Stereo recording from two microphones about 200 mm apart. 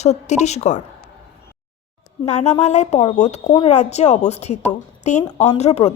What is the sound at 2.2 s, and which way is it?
Speech, 35° left (ahead or behind).